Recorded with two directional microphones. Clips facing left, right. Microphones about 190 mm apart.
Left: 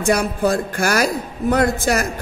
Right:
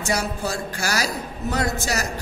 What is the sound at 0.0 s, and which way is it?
Speech, 55° left (ahead or behind).